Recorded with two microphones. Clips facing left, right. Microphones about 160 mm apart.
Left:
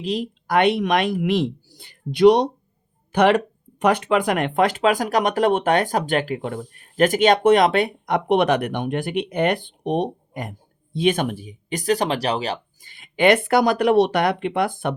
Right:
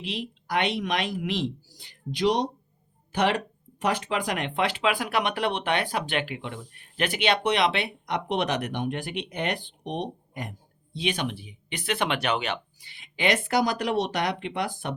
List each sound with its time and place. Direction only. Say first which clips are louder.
0.0 s speech: left 9 dB; 40° left (ahead or behind)